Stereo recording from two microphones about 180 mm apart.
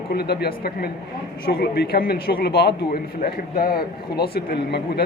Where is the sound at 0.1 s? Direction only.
60° left (ahead or behind).